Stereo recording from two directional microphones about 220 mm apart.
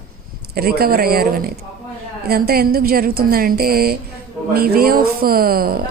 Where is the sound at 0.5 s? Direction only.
45° right (ahead or behind).